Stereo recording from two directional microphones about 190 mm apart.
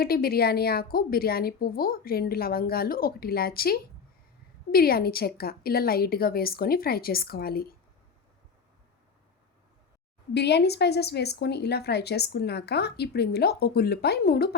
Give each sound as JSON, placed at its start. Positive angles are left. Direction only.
{"t": 0.0, "sound": "a woman's voice", "side_deg": 55}
{"t": 10.3, "sound": "a woman's voice", "side_deg": 60}